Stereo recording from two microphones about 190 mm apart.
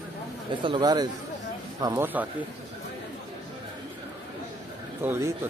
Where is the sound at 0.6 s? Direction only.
25° right (ahead or behind).